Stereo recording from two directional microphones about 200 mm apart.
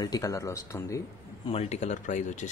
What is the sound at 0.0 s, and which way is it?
Speech, 20° left (ahead or behind).